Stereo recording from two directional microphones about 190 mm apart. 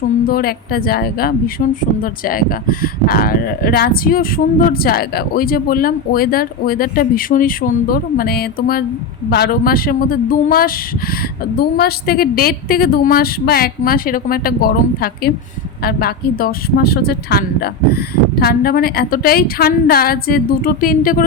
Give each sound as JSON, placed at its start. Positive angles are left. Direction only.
{"t": 0.3, "sound": "a woman's voice", "side_deg": 50}